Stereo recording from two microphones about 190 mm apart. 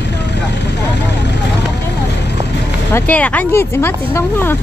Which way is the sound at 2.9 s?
10° left (ahead or behind).